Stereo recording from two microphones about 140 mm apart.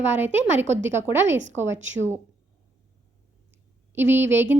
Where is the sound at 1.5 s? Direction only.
15° right (ahead or behind).